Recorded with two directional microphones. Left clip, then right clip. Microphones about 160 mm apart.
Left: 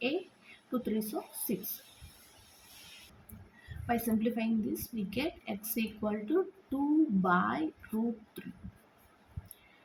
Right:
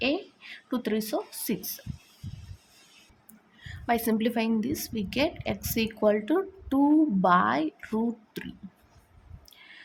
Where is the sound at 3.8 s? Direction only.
90° right; by 7.7 s 75° right (ahead or behind).